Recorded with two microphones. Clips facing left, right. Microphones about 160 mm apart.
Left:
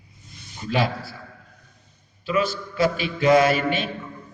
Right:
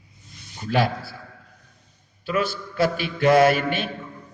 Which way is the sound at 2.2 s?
55° right (ahead or behind).